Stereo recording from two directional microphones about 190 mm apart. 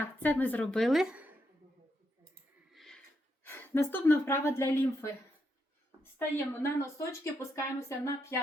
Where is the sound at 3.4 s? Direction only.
10° left (ahead or behind).